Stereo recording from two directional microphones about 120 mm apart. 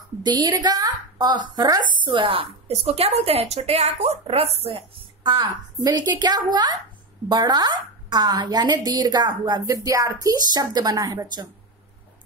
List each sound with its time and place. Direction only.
0.2 s a woman's voice: 35° right (ahead or behind)
5.3 s a woman's voice: 30° right (ahead or behind)